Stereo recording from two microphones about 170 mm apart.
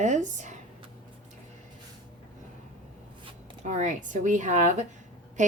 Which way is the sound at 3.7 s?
45° right (ahead or behind).